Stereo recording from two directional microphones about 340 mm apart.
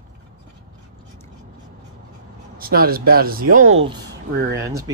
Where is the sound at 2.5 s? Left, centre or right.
Right.